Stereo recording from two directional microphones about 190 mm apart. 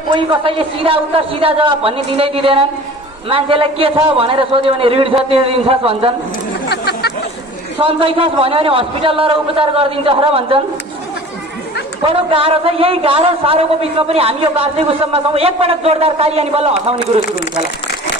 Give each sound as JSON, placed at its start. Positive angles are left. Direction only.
{"t": 0.1, "sound": "a man's voice", "side_deg": -30}
{"t": 6.7, "sound": "chatter", "side_deg": 60}
{"t": 7.8, "sound": "a man's voice", "side_deg": -30}
{"t": 12.0, "sound": "a man's voice", "side_deg": -30}